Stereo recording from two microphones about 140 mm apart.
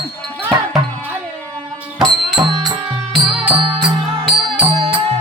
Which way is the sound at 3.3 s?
Centre (ahead or behind).